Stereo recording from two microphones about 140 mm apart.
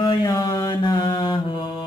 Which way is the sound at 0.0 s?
30° left (ahead or behind).